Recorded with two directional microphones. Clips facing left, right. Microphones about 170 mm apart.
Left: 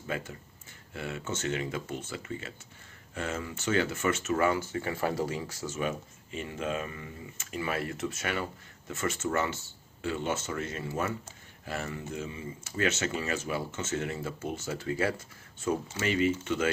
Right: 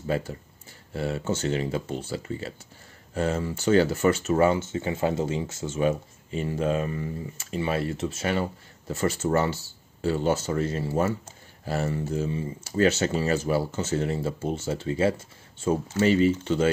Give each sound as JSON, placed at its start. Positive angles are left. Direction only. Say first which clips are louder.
{"t": 0.0, "sound": "speech", "louder": "right 8 dB", "side_deg": -35}